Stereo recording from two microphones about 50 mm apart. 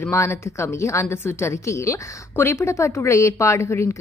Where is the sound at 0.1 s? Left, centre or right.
Left.